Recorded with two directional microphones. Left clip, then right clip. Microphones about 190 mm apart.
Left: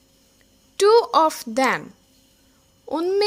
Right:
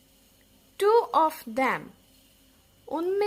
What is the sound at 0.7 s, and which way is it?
Speech, 25° left (ahead or behind).